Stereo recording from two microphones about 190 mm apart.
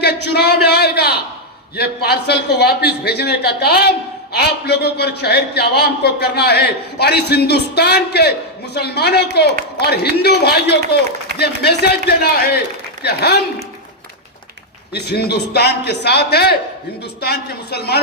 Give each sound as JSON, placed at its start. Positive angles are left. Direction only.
{"t": 0.0, "sound": "a sound", "side_deg": 60}
{"t": 1.7, "sound": "a man's voice", "side_deg": 55}
{"t": 14.9, "sound": "a man's voice", "side_deg": 60}